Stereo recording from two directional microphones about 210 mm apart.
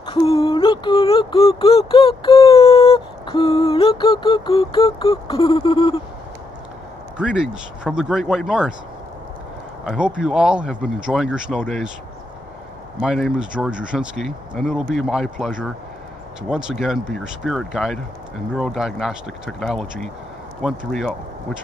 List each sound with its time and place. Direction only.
0.0 s a sound: 25° left (ahead or behind)
7.2 s speech: 5° right (ahead or behind)
9.8 s speech: 5° right (ahead or behind)
13.0 s speech: centre (ahead or behind)